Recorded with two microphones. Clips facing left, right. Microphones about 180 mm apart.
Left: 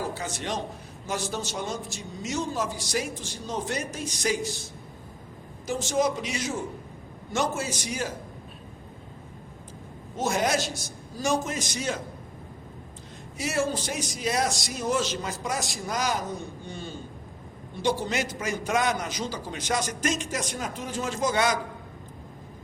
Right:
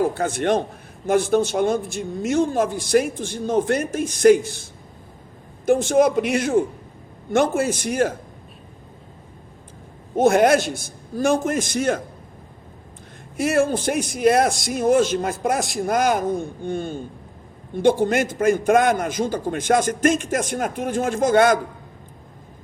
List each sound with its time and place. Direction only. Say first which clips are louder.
0.0 s a man's voice: right 11 dB; 55° right (ahead or behind)
5.6 s a man's voice: right 9 dB; 55° right (ahead or behind)
10.2 s a man's voice: right 11 dB; 55° right (ahead or behind)
13.3 s a man's voice: right 8 dB; 55° right (ahead or behind)